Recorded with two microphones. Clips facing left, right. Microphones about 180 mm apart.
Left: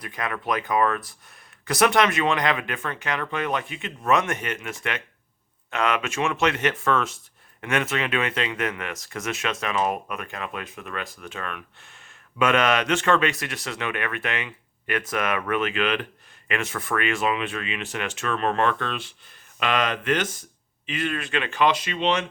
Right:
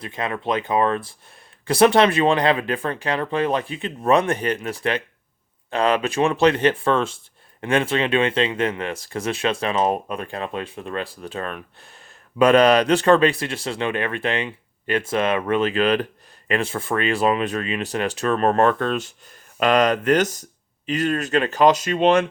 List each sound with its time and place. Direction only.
0.0 s speech: 25° right (ahead or behind); by 22.3 s 50° right (ahead or behind)